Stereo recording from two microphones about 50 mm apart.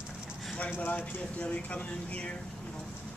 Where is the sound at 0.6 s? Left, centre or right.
Left.